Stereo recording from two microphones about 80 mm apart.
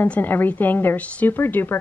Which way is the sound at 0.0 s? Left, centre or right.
Left.